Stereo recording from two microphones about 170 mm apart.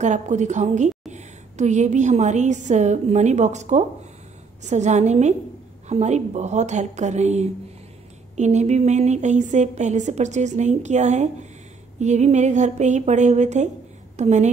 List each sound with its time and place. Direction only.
0.0 s a woman's voice: 45° right (ahead or behind)